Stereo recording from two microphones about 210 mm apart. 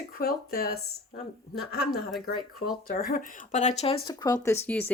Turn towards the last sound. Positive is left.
turn(degrees=10)  # may be behind; listen again after turning